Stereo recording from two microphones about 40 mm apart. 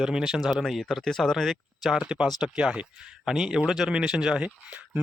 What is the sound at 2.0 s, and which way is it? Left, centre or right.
Speech, right.